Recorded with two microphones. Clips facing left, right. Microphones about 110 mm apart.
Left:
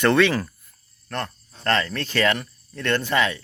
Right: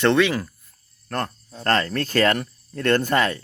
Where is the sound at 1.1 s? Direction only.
40° right (ahead or behind).